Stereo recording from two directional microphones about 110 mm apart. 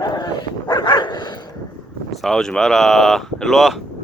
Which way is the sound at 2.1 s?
5° left (ahead or behind).